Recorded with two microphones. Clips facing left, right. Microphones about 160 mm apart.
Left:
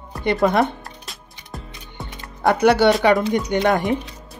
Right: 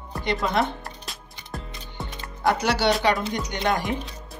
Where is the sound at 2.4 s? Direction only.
55° left (ahead or behind).